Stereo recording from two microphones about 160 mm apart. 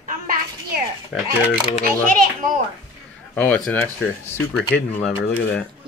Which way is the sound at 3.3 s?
10° left (ahead or behind).